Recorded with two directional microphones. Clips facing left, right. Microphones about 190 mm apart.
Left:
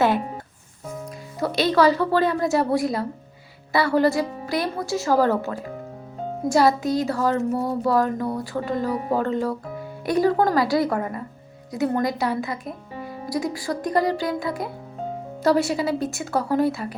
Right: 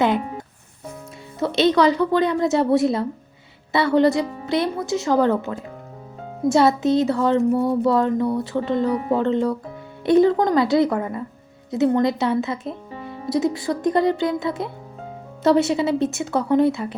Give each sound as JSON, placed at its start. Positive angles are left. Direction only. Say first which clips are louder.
{"t": 1.4, "sound": "a woman's voice", "louder": "right 2 dB", "side_deg": -25}
{"t": 7.5, "sound": "speech", "louder": "right 5 dB", "side_deg": 0}
{"t": 7.9, "sound": "a woman's voice", "louder": "right 3 dB", "side_deg": -25}
{"t": 8.8, "sound": "speech", "louder": "right 2 dB", "side_deg": 0}
{"t": 9.2, "sound": "a woman's voice", "louder": "right 4 dB", "side_deg": -25}